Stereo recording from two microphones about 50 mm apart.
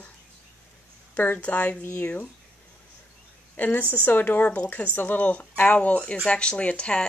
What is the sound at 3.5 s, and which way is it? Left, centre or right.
A woman's voice, left.